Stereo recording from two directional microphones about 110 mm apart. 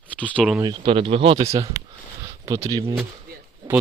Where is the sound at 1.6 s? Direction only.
30° right (ahead or behind).